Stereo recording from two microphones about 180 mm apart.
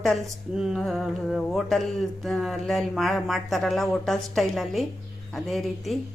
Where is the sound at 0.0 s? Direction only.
Centre (ahead or behind).